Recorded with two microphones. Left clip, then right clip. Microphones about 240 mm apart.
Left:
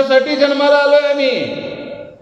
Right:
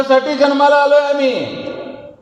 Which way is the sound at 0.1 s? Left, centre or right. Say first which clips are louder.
Even; right.